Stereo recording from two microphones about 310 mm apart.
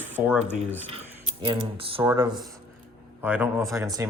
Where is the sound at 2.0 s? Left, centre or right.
Centre.